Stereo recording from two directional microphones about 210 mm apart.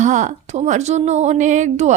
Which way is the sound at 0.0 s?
35° right (ahead or behind).